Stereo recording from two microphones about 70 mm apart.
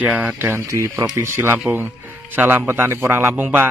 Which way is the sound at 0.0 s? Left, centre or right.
Right.